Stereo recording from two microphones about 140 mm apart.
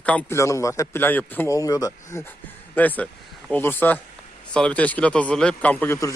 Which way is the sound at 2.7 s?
10° left (ahead or behind).